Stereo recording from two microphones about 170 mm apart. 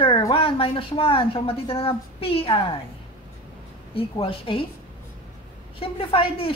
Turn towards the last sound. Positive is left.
turn(degrees=35)  # may be behind; listen again after turning